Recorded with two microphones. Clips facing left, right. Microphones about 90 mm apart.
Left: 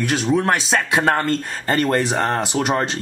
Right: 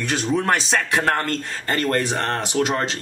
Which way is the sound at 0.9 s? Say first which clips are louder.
Left 3 dB; 20° left (ahead or behind).